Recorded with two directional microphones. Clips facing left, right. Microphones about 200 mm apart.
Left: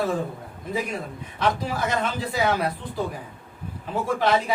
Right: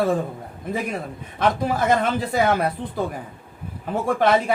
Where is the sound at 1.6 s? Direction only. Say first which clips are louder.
Right 6 dB; 55° right (ahead or behind).